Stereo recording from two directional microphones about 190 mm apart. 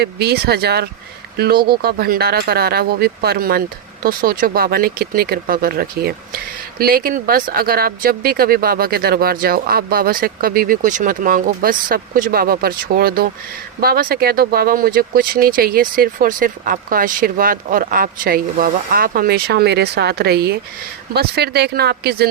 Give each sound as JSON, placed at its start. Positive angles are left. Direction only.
{"t": 0.0, "sound": "speech", "side_deg": -60}